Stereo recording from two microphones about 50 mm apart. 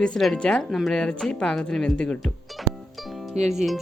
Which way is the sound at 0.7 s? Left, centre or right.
Centre.